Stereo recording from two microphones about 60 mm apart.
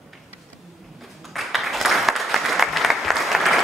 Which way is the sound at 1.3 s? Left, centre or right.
Centre.